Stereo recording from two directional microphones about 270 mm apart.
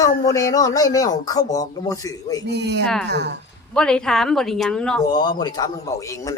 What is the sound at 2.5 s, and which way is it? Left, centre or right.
Speech, right.